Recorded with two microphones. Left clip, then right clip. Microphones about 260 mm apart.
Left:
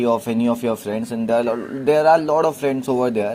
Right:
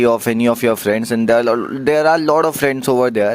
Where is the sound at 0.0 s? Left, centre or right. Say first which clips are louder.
Right 5 dB; right.